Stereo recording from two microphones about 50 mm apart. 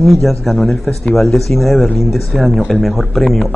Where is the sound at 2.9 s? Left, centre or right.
Left.